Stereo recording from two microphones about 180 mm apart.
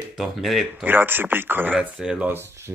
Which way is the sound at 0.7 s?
10° right (ahead or behind).